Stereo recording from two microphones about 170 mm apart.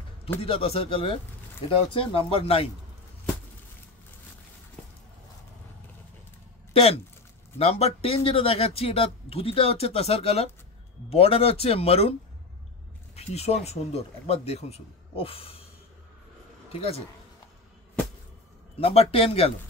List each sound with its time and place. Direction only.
0.4 s speech: 35° left (ahead or behind)
6.7 s speech: 35° left (ahead or behind)
13.1 s a sound: 40° left (ahead or behind)
13.7 s speech: 40° left (ahead or behind)
18.8 s speech: 35° left (ahead or behind)